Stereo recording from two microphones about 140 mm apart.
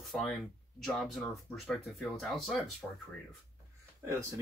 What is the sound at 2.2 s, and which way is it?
Speech, centre (ahead or behind).